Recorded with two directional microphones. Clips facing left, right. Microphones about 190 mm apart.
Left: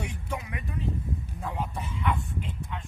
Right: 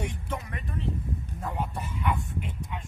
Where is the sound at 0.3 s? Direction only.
10° left (ahead or behind).